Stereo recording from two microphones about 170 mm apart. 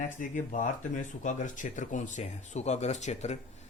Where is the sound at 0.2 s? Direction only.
50° left (ahead or behind).